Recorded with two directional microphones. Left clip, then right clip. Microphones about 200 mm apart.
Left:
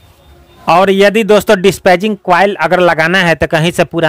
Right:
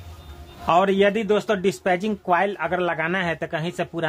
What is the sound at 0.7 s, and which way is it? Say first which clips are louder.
A man's voice: left 10 dB; 45° left (ahead or behind).